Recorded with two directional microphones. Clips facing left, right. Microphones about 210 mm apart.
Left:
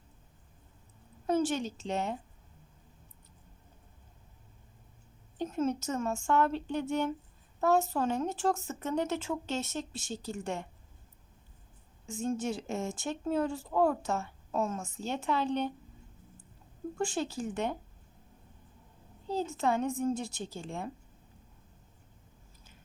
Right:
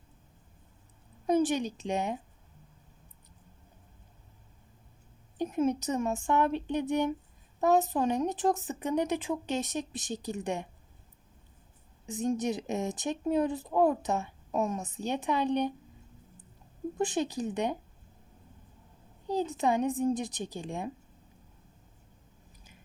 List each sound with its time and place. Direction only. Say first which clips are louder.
1.3 s speech: right 3 dB; 15° right (ahead or behind)
5.4 s speech: right 3 dB; 15° right (ahead or behind)
12.0 s speech: right 3 dB; 15° right (ahead or behind)
17.0 s speech: right 3 dB; 20° right (ahead or behind)
19.3 s speech: right 2 dB; 15° right (ahead or behind)